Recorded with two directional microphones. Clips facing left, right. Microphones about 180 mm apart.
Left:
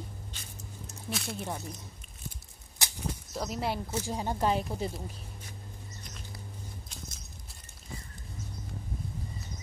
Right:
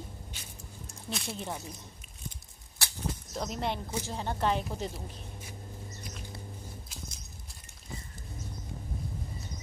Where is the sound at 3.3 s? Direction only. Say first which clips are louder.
Left 1 dB; 5° left (ahead or behind).